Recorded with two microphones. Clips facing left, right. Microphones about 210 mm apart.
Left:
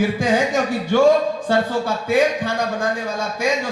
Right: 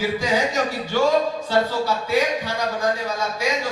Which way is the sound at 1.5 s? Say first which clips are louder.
Left 1 dB; 50° left (ahead or behind).